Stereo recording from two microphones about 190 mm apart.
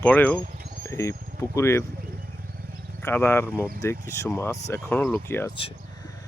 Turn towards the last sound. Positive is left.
turn(degrees=10)  # may be behind; listen again after turning